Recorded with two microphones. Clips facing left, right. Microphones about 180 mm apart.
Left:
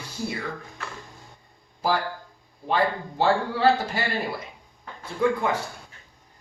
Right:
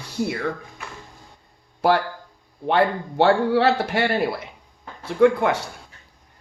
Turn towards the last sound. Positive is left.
turn(degrees=-70)  # may be behind; listen again after turning